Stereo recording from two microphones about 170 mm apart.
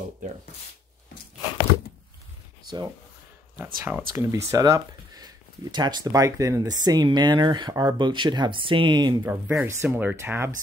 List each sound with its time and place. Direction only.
3.5 s speech: 10° right (ahead or behind)
9.2 s speech: 15° right (ahead or behind)